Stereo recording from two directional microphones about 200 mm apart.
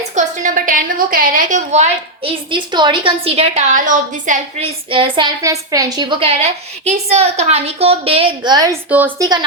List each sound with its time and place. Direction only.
0.2 s a woman's voice: 40° right (ahead or behind)
4.9 s a woman's voice: 25° right (ahead or behind)
8.9 s a woman's voice: 10° right (ahead or behind)